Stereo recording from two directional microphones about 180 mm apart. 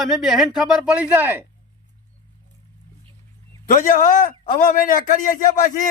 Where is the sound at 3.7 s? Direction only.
50° left (ahead or behind).